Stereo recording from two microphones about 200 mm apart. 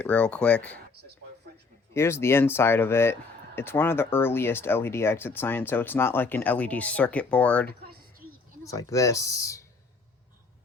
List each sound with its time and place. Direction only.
0.0 s speech: 5° left (ahead or behind)
1.9 s speech: 15° left (ahead or behind)
7.7 s a sound: 50° right (ahead or behind)
8.6 s speech: 15° left (ahead or behind)